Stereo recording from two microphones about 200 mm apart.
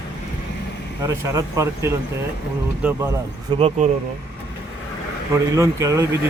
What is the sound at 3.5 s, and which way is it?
Speech, 30° right (ahead or behind).